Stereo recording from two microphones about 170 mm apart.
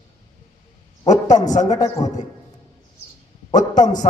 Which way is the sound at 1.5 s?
45° left (ahead or behind).